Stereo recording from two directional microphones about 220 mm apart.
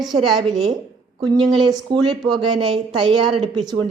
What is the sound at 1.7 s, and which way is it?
Speech, 20° right (ahead or behind).